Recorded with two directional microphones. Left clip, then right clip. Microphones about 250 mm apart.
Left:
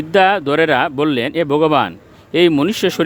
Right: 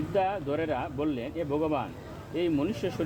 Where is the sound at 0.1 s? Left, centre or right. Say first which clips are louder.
Left 16 dB; left.